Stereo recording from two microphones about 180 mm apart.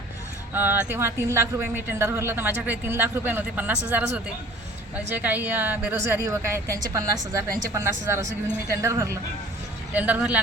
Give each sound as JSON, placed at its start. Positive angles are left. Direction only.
{"t": 0.5, "sound": "speech", "side_deg": -10}
{"t": 5.1, "sound": "speech", "side_deg": -10}